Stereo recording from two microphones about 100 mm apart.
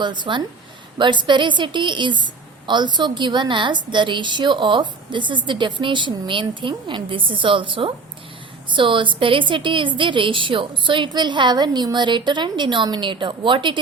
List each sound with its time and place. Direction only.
0.0 s a woman's voice: 50° right (ahead or behind)